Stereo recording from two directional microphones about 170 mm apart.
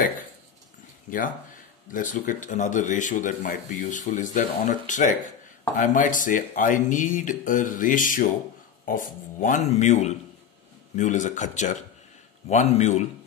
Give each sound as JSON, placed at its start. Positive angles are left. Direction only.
{"t": 1.9, "sound": "speech", "side_deg": 50}